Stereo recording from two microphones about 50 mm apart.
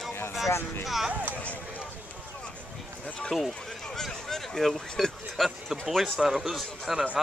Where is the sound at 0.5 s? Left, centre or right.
Left.